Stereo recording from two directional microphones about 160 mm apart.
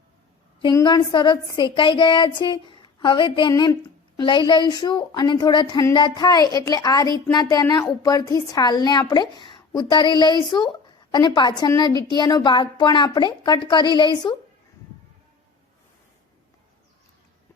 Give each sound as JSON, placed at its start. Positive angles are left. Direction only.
{"t": 0.6, "sound": "speech", "side_deg": 25}